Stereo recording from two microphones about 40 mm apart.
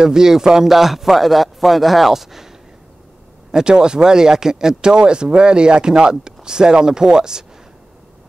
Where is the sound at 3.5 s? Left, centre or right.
Centre.